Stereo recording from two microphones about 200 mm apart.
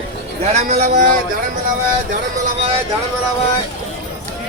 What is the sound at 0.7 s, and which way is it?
Speech, 40° right (ahead or behind).